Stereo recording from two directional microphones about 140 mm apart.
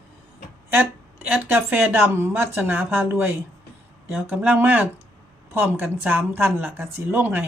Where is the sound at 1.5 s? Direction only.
15° right (ahead or behind).